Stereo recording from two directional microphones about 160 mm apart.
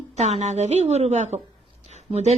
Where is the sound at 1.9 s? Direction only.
45° right (ahead or behind).